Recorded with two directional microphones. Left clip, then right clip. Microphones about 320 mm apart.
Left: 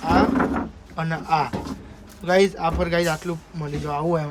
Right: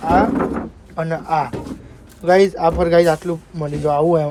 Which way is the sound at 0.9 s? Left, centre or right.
Centre.